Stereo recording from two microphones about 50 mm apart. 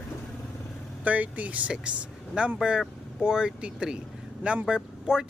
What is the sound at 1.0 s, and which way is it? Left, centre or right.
Speech, right.